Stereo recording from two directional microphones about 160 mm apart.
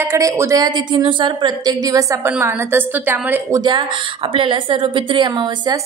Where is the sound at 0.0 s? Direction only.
15° right (ahead or behind).